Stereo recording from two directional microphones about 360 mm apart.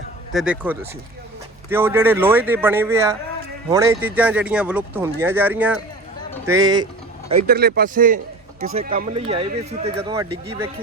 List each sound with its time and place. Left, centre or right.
0.3 s speech: centre
7.4 s a man's voice: right